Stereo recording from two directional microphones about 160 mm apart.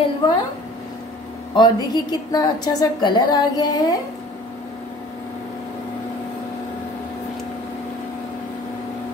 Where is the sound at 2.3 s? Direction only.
25° left (ahead or behind).